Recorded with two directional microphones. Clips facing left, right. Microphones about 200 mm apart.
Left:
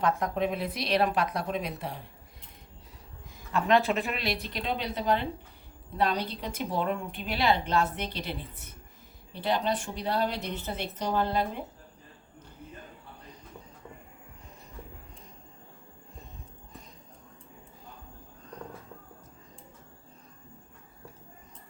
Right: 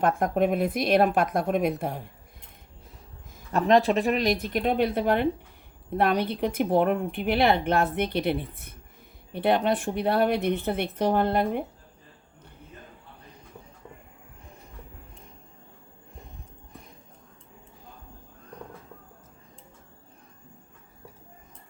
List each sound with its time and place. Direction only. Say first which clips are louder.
0.0 s a woman's voice: right 5 dB; 50° right (ahead or behind)
3.3 s speech: right 4 dB; 40° right (ahead or behind)
4.4 s a woman's voice: right 9 dB; 50° right (ahead or behind)